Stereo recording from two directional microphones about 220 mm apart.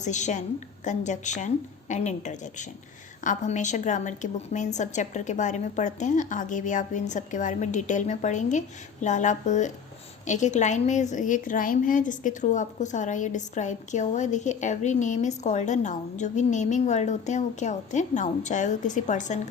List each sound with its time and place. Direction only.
0.0 s a woman's voice: 35° left (ahead or behind)